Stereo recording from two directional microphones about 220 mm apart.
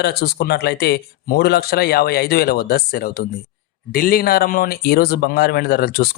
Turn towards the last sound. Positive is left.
turn(degrees=45)  # may be behind; listen again after turning